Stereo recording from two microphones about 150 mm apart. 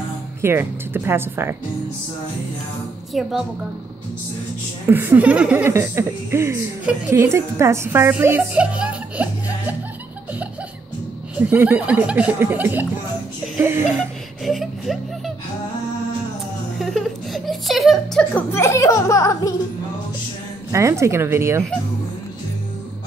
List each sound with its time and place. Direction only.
0.4 s speech: 15° right (ahead or behind)
3.1 s speech: centre (ahead or behind)
4.8 s a woman's voice: 15° right (ahead or behind)
11.3 s speech: 10° right (ahead or behind)
13.9 s speech: centre (ahead or behind)
16.8 s speech: centre (ahead or behind)
18.3 s speech: 15° left (ahead or behind)
20.7 s speech: 20° right (ahead or behind)